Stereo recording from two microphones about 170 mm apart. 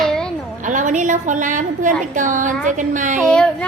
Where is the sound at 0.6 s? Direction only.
50° right (ahead or behind).